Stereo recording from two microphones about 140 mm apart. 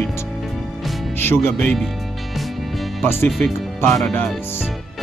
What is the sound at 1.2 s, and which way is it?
Speech, 15° left (ahead or behind).